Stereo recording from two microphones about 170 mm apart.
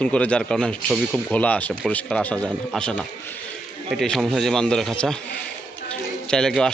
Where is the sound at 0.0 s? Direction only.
5° left (ahead or behind).